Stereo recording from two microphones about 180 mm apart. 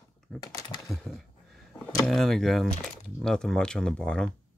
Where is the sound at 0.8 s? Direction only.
Centre (ahead or behind).